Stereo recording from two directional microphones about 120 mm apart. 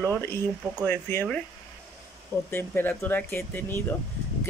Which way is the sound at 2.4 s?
15° left (ahead or behind).